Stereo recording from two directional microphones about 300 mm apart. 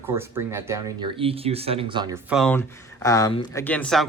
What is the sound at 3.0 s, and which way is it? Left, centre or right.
Speech, centre.